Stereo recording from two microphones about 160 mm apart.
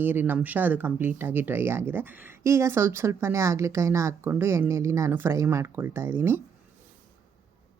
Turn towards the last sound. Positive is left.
turn(degrees=-15)  # may be behind; listen again after turning